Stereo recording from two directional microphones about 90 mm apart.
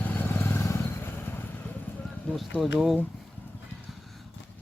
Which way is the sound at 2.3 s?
15° left (ahead or behind).